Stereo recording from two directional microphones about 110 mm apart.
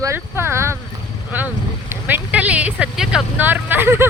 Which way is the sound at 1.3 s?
15° right (ahead or behind).